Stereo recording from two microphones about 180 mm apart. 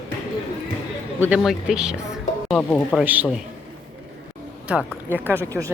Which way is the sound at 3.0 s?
10° right (ahead or behind).